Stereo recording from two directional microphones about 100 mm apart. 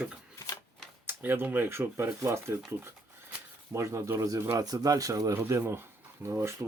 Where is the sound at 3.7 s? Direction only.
30° right (ahead or behind).